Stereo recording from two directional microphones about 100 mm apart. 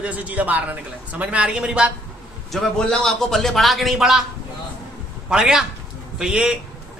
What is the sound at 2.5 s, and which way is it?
A man's voice, 5° left (ahead or behind).